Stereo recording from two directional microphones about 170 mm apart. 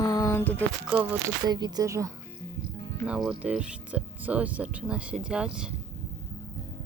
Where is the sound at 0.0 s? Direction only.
20° left (ahead or behind).